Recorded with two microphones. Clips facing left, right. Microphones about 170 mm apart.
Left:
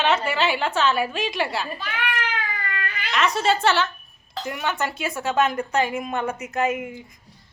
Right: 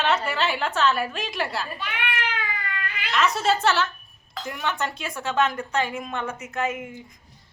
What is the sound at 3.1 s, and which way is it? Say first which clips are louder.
A woman's voice: left 1 dB; centre (ahead or behind).